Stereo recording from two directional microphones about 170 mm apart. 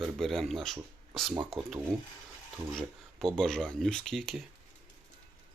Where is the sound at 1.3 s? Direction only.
30° right (ahead or behind).